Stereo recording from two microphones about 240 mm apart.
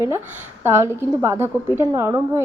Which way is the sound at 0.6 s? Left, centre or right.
Centre.